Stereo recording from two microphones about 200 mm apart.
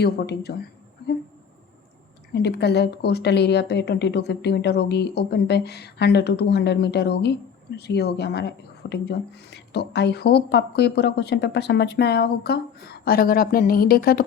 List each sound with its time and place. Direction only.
0.0 s speech: 55° left (ahead or behind)
2.3 s speech: 55° left (ahead or behind)